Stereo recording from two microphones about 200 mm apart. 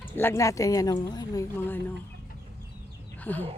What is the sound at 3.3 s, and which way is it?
Speech, 10° left (ahead or behind).